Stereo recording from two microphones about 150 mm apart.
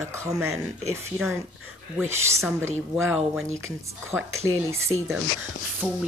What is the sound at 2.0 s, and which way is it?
Speech, 15° right (ahead or behind).